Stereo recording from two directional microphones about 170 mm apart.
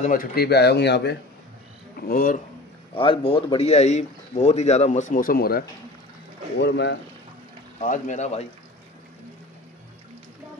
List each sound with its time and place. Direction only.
0.0 s speech: 55° left (ahead or behind); by 1.1 s 80° left
2.0 s speech: 60° left (ahead or behind)
2.9 s speech: 35° left (ahead or behind); by 5.7 s 60° left (ahead or behind)
6.6 s speech: 85° left
7.8 s a man's voice: 45° left (ahead or behind)